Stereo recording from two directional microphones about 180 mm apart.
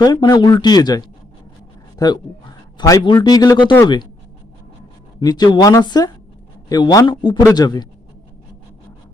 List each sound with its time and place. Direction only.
0.0 s a man's voice: 25° left (ahead or behind)
5.2 s a man's voice: 20° left (ahead or behind)